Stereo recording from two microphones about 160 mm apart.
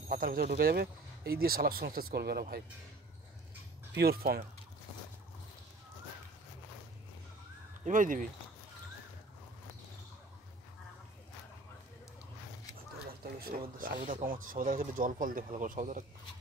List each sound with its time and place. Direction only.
0.1 s speech: 65° right (ahead or behind); by 2.4 s 80° right
4.0 s speech: 75° right (ahead or behind)
7.8 s speech: 55° right (ahead or behind)
13.4 s speech: 65° right (ahead or behind)